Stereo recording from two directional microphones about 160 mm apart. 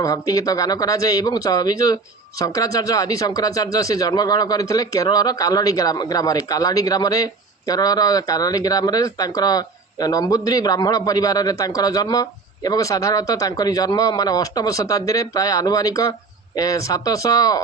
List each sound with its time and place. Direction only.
0.0 s speech: 20° left (ahead or behind)